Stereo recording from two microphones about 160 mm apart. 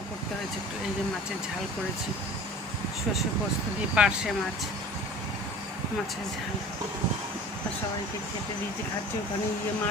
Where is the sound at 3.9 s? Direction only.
5° right (ahead or behind).